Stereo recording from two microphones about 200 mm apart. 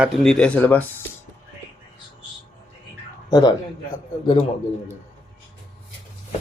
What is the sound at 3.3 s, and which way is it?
Speech, 20° left (ahead or behind).